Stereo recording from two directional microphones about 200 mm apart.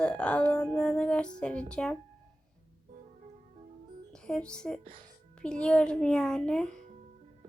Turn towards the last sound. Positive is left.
turn(degrees=5)  # may be behind; listen again after turning